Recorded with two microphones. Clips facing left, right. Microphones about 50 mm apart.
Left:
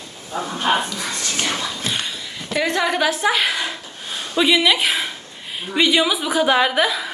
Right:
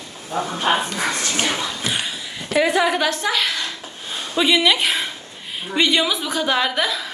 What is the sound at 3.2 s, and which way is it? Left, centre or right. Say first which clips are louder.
Speech: left 3 dB; centre.